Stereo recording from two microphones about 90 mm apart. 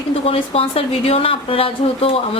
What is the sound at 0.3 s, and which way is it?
Speech, 90° left.